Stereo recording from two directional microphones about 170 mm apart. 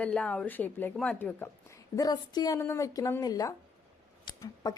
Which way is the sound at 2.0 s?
20° left (ahead or behind).